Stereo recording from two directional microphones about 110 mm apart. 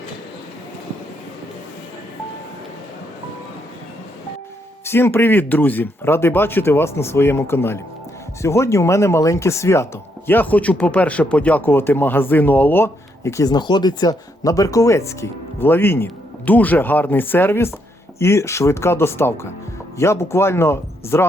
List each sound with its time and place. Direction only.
4.9 s speech: 20° left (ahead or behind)